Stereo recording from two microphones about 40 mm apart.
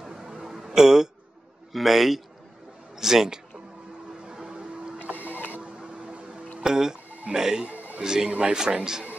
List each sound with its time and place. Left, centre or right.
0.0 s a sound: centre
1.7 s a man's voice: centre
4.3 s vehicle: centre
5.0 s mechanisms: right
6.6 s speech: centre